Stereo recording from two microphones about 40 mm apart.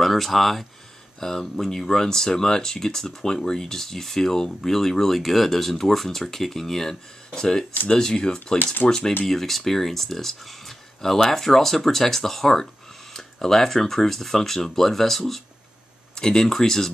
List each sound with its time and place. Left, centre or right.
0.0 s speech: centre